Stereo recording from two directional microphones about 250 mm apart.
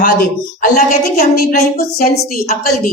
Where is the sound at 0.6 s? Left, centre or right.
Left.